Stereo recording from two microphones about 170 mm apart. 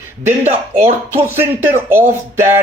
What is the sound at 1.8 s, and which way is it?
Speech, 15° right (ahead or behind).